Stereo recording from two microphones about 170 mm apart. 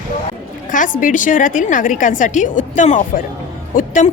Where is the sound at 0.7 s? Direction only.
50° left (ahead or behind).